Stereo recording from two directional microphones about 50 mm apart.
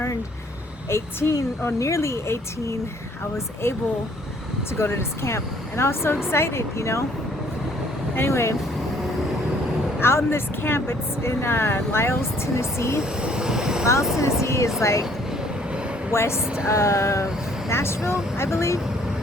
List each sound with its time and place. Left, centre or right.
0.9 s a woman's voice: left
4.8 s a woman's voice: left
8.3 s speech: left
10.0 s speech: left
13.0 s vehicle: centre
14.2 s speech: left
15.3 s train: centre
16.1 s a woman's voice: left